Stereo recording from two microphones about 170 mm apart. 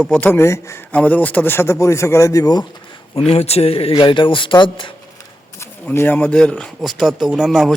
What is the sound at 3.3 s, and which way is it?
Speech, 35° left (ahead or behind).